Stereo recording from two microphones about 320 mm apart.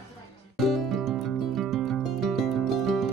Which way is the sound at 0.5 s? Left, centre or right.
Centre.